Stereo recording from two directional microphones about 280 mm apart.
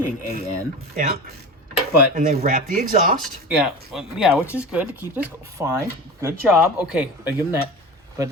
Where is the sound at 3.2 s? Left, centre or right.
Centre.